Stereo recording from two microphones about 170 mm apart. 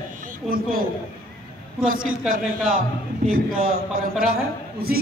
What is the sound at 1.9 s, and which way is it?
A man's voice, 55° right (ahead or behind).